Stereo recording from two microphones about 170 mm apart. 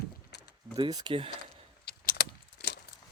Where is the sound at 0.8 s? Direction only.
25° right (ahead or behind).